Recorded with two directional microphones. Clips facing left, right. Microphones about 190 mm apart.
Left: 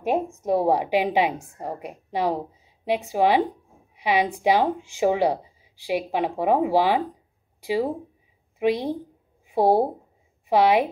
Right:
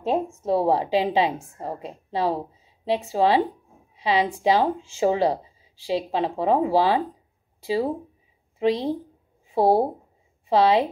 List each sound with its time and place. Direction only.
0.0 s a woman's voice: 15° left (ahead or behind)